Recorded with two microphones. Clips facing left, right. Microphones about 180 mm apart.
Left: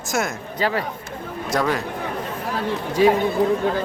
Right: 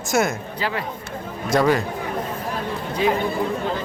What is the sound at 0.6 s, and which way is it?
Speech, 40° left (ahead or behind).